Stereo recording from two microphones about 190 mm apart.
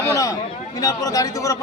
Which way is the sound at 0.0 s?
15° left (ahead or behind).